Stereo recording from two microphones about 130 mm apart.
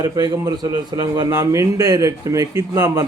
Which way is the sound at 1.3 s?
25° right (ahead or behind).